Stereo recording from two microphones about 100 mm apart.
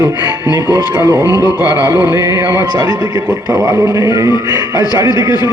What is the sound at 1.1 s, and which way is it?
Speech, 35° left (ahead or behind).